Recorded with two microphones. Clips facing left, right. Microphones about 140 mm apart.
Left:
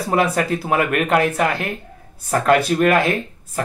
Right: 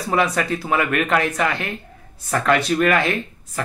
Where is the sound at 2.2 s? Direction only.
45° left (ahead or behind).